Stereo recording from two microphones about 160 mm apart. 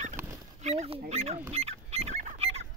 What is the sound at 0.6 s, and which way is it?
Speech, 45° right (ahead or behind).